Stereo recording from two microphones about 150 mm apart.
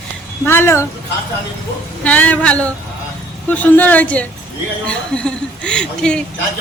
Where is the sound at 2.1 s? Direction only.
10° left (ahead or behind).